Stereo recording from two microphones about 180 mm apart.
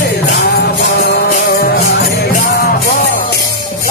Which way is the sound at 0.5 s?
60° left (ahead or behind).